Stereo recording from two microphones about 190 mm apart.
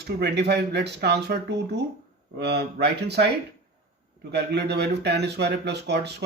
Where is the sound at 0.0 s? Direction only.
60° right (ahead or behind).